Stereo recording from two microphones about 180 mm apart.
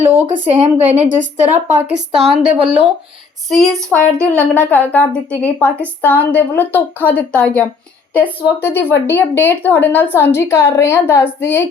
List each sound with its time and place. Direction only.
0.3 s a woman's voice: 40° right (ahead or behind)
3.5 s a woman's voice: centre (ahead or behind)